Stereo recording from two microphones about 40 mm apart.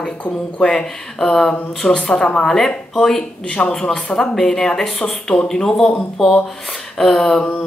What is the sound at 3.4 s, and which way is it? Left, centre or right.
Speech, left.